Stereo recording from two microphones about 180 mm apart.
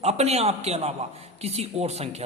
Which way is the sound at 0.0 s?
35° right (ahead or behind).